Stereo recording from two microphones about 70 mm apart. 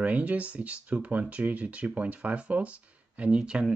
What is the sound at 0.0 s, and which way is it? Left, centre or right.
Speech, right.